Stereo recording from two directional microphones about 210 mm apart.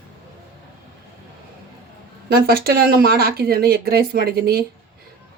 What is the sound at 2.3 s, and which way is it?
Speech, 45° right (ahead or behind).